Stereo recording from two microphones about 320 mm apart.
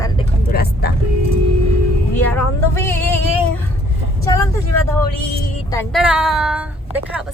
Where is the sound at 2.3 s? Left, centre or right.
Centre.